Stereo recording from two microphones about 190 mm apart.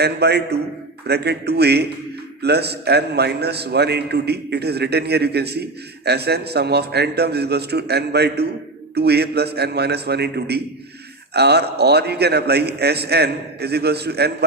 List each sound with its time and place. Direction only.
0.0 s a man's voice: 60° right (ahead or behind)